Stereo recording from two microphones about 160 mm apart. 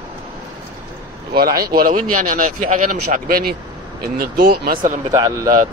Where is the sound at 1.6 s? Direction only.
65° right (ahead or behind).